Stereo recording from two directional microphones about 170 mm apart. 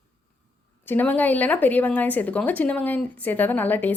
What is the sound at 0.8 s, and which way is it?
Speech, 10° left (ahead or behind).